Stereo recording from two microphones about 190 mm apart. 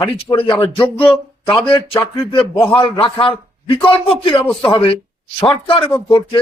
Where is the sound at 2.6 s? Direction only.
25° left (ahead or behind).